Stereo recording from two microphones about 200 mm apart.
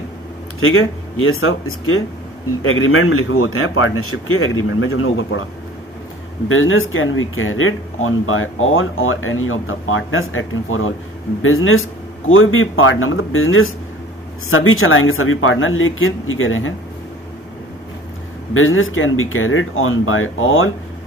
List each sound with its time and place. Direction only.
0.6 s speech: 90° left
6.5 s speech: 90° left
18.5 s speech: 90° left